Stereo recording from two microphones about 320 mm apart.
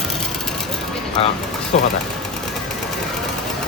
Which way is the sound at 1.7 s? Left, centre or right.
Left.